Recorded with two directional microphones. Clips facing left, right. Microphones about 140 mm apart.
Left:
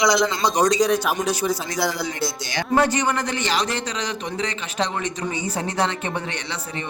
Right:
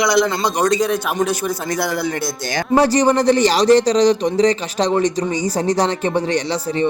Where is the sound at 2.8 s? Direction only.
35° right (ahead or behind).